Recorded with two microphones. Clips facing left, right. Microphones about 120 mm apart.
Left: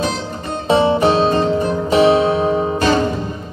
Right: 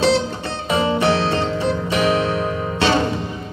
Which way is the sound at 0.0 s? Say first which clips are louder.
Right 4 dB; 75° right (ahead or behind).